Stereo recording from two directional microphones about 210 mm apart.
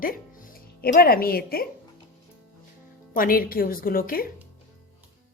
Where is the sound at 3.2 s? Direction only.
45° left (ahead or behind).